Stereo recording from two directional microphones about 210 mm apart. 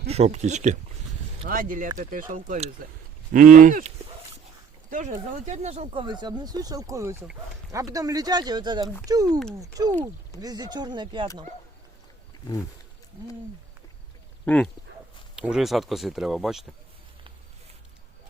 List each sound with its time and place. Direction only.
0.1 s speech: 30° right (ahead or behind)
10.4 s speech: 20° right (ahead or behind)
14.4 s speech: 5° left (ahead or behind)